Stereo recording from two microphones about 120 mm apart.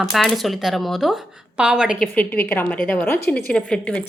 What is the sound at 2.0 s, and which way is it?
A woman's voice, 15° left (ahead or behind).